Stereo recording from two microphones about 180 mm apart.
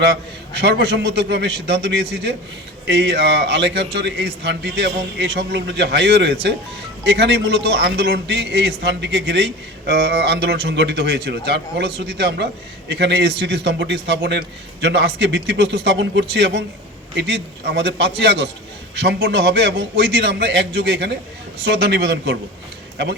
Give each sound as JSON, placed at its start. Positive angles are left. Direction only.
{"t": 0.0, "sound": "a man's voice", "side_deg": -65}